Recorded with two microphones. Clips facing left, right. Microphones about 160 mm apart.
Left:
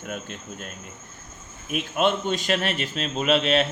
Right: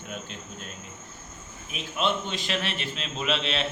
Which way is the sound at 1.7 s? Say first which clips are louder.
Left 5 dB; 50° left (ahead or behind).